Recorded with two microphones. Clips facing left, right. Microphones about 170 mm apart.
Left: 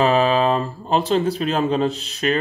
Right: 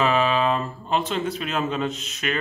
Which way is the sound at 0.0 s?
35° left (ahead or behind).